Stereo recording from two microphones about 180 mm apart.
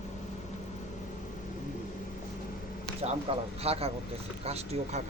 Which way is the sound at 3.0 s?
35° right (ahead or behind).